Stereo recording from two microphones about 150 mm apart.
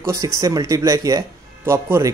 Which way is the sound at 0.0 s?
20° right (ahead or behind).